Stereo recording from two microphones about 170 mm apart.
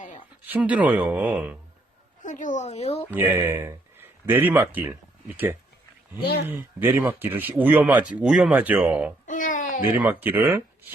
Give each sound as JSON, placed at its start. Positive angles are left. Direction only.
{"t": 0.4, "sound": "speech", "side_deg": -10}
{"t": 2.2, "sound": "speech", "side_deg": 50}
{"t": 3.1, "sound": "speech", "side_deg": -10}
{"t": 6.6, "sound": "speech", "side_deg": -10}
{"t": 9.2, "sound": "babbling", "side_deg": 50}
{"t": 9.9, "sound": "speech", "side_deg": -10}